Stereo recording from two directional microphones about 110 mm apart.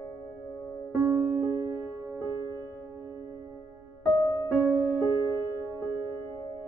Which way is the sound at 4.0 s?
40° left (ahead or behind).